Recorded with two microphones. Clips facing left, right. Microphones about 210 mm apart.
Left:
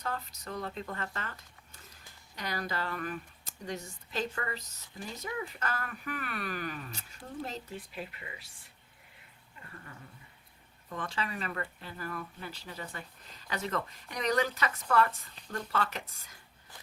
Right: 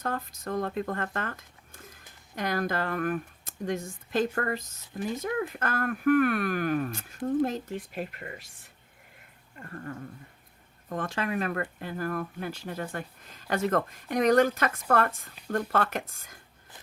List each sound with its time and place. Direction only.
0.0 s speech: 50° right (ahead or behind)
9.6 s speech: 50° right (ahead or behind)